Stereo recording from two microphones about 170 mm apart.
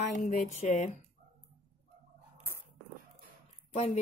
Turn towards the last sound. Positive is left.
turn(degrees=40)  # may be behind; listen again after turning